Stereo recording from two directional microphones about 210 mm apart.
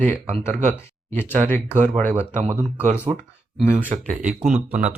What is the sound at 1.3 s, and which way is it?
Speech, 35° right (ahead or behind).